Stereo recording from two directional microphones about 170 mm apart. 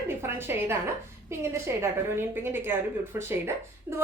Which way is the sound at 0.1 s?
15° right (ahead or behind).